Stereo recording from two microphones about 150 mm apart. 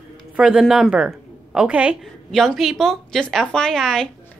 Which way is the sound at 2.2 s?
Centre (ahead or behind).